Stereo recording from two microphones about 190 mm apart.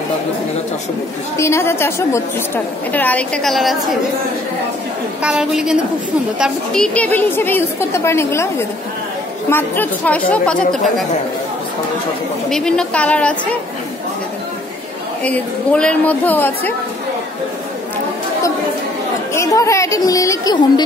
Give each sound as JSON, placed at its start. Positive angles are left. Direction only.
{"t": 1.4, "sound": "a woman's voice", "side_deg": 15}
{"t": 5.2, "sound": "a woman's voice", "side_deg": -5}
{"t": 12.4, "sound": "a woman's voice", "side_deg": 5}
{"t": 15.2, "sound": "a woman's voice", "side_deg": 5}
{"t": 19.3, "sound": "a woman's voice", "side_deg": 15}